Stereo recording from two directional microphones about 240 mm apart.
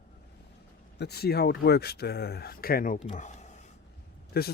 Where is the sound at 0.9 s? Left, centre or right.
Left.